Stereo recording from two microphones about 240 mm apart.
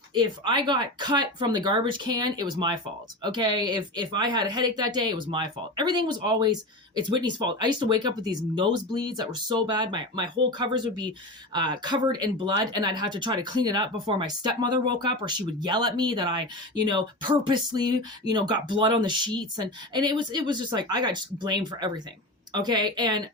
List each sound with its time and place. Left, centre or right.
0.1 s speech: centre